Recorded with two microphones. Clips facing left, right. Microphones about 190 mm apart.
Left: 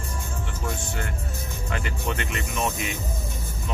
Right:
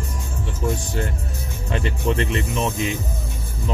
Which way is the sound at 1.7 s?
30° right (ahead or behind).